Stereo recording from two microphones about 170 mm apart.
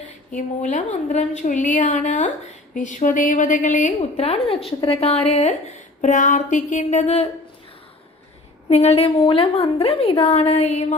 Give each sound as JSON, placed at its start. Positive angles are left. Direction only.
{"t": 0.3, "sound": "a woman's voice", "side_deg": 45}
{"t": 8.7, "sound": "a woman's voice", "side_deg": 40}